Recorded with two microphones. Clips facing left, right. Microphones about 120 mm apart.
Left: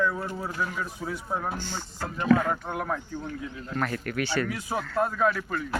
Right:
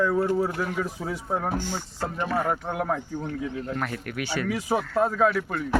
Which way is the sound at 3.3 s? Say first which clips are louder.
Right 5 dB; 65° right (ahead or behind).